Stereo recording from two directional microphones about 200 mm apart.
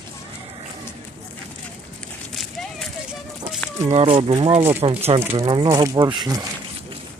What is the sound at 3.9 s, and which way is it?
Speech, 30° right (ahead or behind).